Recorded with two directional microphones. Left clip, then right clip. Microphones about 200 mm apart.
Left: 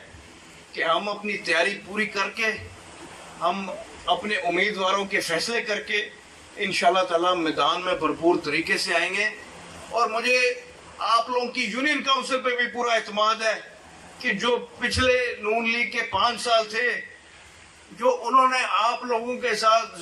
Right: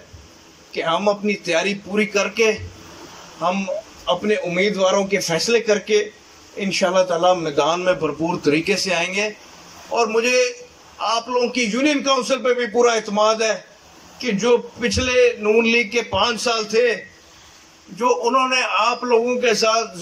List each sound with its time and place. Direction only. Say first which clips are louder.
0.7 s a man's voice: right 5 dB; 55° right (ahead or behind)